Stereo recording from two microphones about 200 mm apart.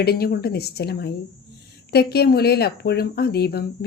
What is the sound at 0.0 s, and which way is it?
Speech, 50° left (ahead or behind).